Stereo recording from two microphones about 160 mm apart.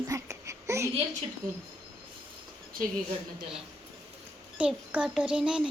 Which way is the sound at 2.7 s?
60° right (ahead or behind).